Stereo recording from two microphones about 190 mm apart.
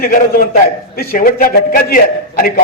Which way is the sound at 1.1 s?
45° left (ahead or behind).